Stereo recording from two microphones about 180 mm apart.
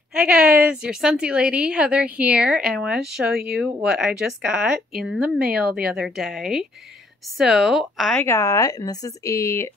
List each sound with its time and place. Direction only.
0.1 s a woman's voice: 5° right (ahead or behind)
8.2 s speech: 15° left (ahead or behind)